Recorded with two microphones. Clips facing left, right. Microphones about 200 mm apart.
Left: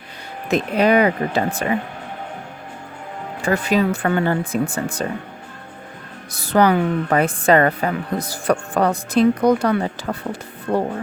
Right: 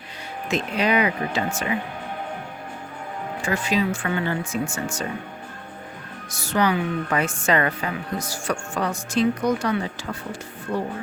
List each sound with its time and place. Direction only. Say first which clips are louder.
0.5 s a woman's voice: left 6 dB; 55° left (ahead or behind)
3.4 s a woman's voice: left 5 dB; 60° left (ahead or behind)
6.3 s a woman's voice: left 6 dB; 55° left (ahead or behind)